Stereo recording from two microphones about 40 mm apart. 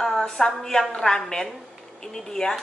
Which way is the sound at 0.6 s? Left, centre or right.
Centre.